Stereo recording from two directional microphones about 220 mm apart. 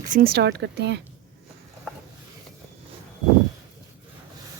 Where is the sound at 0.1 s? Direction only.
40° right (ahead or behind).